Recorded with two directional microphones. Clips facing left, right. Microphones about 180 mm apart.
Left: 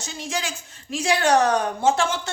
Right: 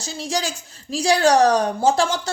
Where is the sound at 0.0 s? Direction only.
35° right (ahead or behind).